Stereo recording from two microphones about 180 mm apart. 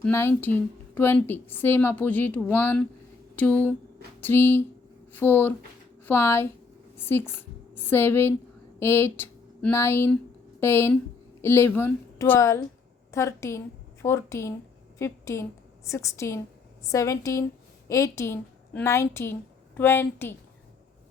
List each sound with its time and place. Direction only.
0.0 s a woman's voice: 15° left (ahead or behind)